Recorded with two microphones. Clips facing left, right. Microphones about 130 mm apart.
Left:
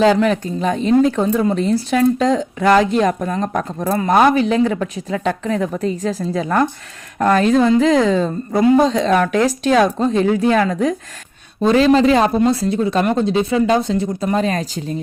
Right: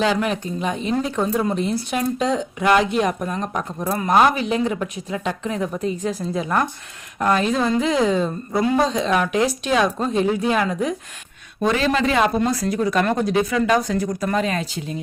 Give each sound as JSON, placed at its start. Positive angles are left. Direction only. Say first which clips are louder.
{"t": 0.0, "sound": "speech", "louder": "left 7 dB", "side_deg": 40}
{"t": 11.6, "sound": "speech", "louder": "left 7 dB", "side_deg": 30}